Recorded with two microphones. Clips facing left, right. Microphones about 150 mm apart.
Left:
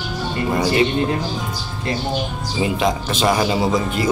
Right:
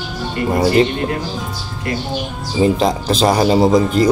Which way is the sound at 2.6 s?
35° right (ahead or behind).